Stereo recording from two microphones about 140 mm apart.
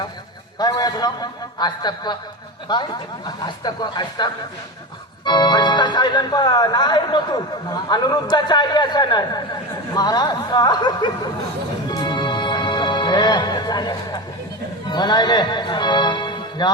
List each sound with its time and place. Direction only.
0.6 s speech: 30° left (ahead or behind)
11.9 s music: 30° left (ahead or behind)
14.8 s a man's voice: 30° left (ahead or behind)